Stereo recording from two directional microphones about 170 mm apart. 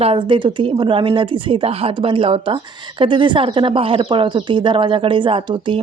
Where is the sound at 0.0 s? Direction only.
30° right (ahead or behind).